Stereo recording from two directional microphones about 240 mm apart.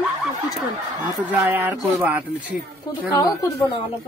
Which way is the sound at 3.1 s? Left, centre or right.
Centre.